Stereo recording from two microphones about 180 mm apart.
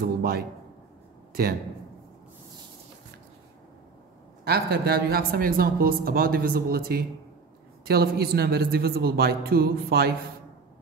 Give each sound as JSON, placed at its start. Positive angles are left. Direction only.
{"t": 0.0, "sound": "speech", "side_deg": -60}
{"t": 4.5, "sound": "speech", "side_deg": -60}